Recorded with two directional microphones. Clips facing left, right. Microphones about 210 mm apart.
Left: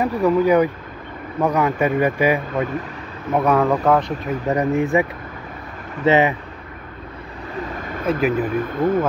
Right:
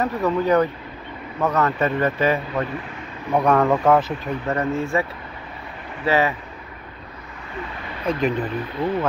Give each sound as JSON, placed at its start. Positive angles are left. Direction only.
{"t": 0.0, "sound": "speech", "side_deg": 10}
{"t": 3.3, "sound": "speech", "side_deg": 5}
{"t": 4.5, "sound": "speech", "side_deg": 15}
{"t": 6.0, "sound": "speech", "side_deg": 20}
{"t": 8.1, "sound": "speech", "side_deg": 5}
{"t": 8.7, "sound": "speech", "side_deg": 45}